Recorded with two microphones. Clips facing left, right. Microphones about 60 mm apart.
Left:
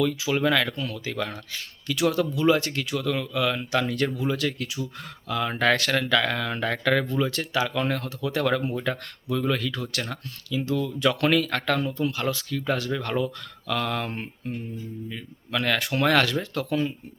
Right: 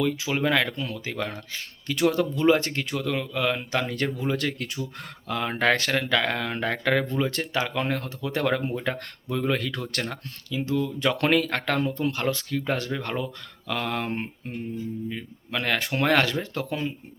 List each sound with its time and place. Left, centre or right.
0.0 s speech: right
4.3 s speech: right
10.6 s speech: right
12.9 s speech: right